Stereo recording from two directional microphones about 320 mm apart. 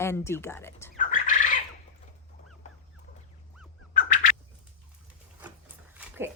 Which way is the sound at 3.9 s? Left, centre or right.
Left.